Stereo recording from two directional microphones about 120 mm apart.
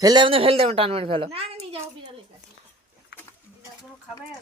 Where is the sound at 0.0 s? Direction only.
40° right (ahead or behind).